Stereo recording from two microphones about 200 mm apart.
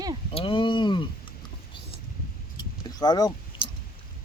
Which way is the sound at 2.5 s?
20° left (ahead or behind).